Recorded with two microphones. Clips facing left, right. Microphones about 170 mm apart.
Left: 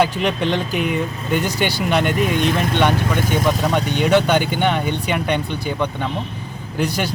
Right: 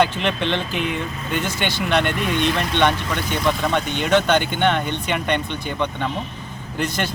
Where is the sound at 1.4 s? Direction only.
40° left (ahead or behind).